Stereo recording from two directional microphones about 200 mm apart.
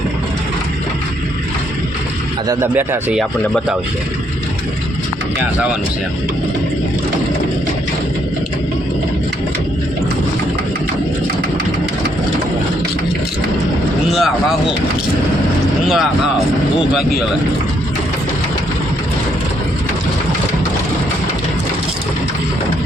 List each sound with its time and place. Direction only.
2.5 s speech: 10° right (ahead or behind)
14.1 s speech: centre (ahead or behind)